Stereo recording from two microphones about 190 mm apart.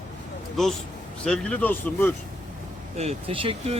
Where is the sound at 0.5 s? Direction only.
Centre (ahead or behind).